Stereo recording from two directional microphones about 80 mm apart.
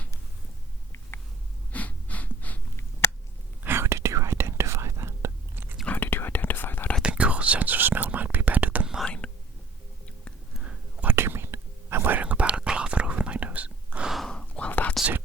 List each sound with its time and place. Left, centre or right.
1.7 s breathing: centre
3.6 s whispering: right
5.8 s whispering: left
7.0 s whispering: centre
9.0 s whispering: centre
10.6 s whispering: centre
14.1 s a sound: centre
14.3 s whispering: centre